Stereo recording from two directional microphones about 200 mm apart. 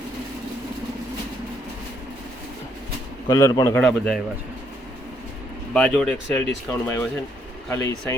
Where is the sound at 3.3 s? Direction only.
15° left (ahead or behind).